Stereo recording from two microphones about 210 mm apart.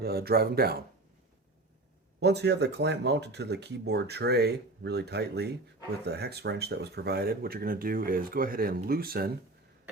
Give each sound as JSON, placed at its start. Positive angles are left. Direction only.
{"t": 0.0, "sound": "speech", "side_deg": -50}
{"t": 2.2, "sound": "speech", "side_deg": -55}